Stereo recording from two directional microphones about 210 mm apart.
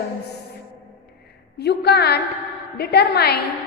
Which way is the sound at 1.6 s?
50° left (ahead or behind).